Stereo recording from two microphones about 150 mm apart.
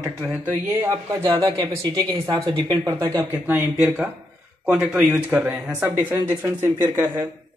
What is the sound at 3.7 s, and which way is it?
Speech, 5° right (ahead or behind).